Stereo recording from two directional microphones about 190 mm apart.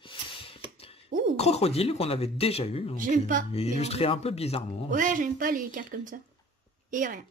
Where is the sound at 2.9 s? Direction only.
45° right (ahead or behind).